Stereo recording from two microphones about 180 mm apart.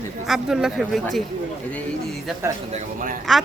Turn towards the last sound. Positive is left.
turn(degrees=-50)  # may be behind; listen again after turning